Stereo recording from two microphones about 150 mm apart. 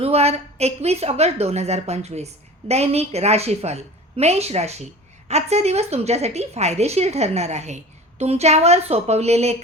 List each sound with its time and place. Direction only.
0.0 s a woman's voice: 45° right (ahead or behind)